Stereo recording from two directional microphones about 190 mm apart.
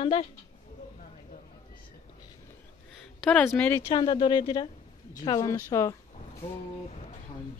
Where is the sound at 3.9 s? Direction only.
25° left (ahead or behind).